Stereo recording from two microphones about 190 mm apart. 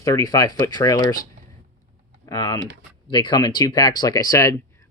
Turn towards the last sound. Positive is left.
turn(degrees=15)  # may be behind; listen again after turning